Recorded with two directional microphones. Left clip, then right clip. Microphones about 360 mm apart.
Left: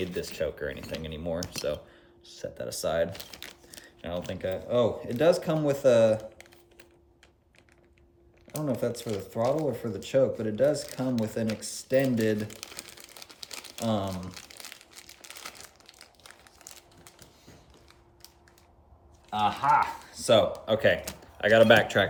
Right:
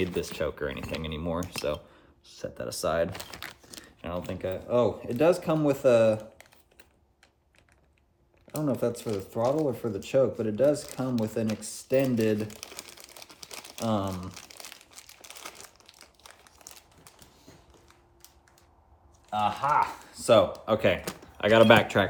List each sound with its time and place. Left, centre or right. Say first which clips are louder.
0.0 s speech: right 2 dB; centre
8.4 s a sound: right 2 dB; centre
19.3 s speech: left 2 dB; centre